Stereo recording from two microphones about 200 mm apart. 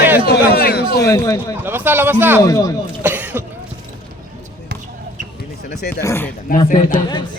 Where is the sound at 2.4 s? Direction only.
15° left (ahead or behind).